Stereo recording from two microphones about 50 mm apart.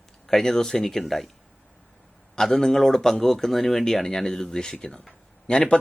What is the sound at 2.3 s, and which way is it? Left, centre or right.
Speech, centre.